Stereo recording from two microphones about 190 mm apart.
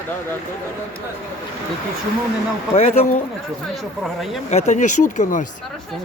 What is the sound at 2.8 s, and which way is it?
Speech, 30° left (ahead or behind).